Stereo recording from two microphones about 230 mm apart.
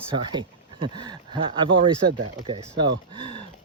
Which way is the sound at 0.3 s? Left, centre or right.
Centre.